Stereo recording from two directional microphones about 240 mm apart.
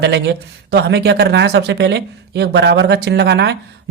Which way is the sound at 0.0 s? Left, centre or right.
Right.